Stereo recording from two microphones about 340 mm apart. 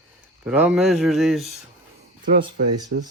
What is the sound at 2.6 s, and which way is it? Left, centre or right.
Speech, right.